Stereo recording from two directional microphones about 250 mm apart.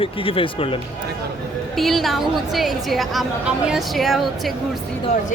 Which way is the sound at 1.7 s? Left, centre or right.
Centre.